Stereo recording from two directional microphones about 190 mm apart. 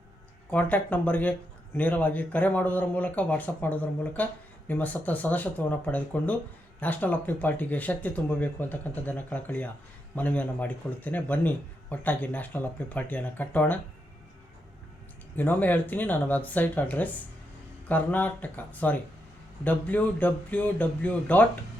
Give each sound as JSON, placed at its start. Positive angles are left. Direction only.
{"t": 0.5, "sound": "a man's voice", "side_deg": 10}
{"t": 15.4, "sound": "a man's voice", "side_deg": 10}